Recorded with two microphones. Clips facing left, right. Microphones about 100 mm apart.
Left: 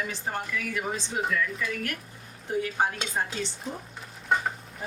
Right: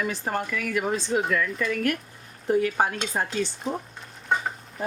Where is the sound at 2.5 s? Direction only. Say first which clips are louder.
Right 6 dB; 60° right (ahead or behind).